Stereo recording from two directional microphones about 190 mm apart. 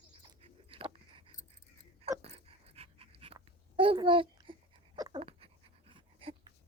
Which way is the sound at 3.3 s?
25° right (ahead or behind).